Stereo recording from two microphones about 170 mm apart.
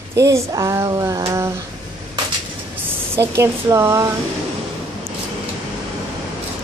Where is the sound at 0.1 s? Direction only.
20° right (ahead or behind).